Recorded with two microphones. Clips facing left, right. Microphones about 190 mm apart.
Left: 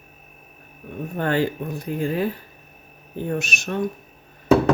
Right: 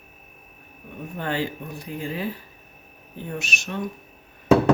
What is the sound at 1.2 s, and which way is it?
Speech, 50° left (ahead or behind).